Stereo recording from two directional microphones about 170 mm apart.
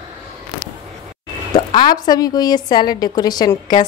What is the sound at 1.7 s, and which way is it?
A woman's voice, 25° left (ahead or behind).